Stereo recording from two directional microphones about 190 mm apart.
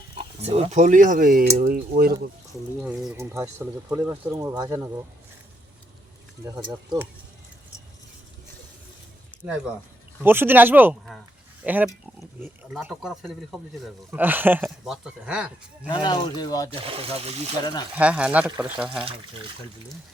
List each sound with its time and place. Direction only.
0.4 s speech: 35° right (ahead or behind); by 2.1 s 55° right (ahead or behind)
2.8 s speech: 5° right (ahead or behind)
6.4 s speech: 20° right (ahead or behind)
10.2 s speech: 10° right (ahead or behind)
15.9 s speech: 25° left (ahead or behind)
16.9 s speech: 30° right (ahead or behind)
17.6 s speech: 20° left (ahead or behind)
17.9 s speech: 5° right (ahead or behind)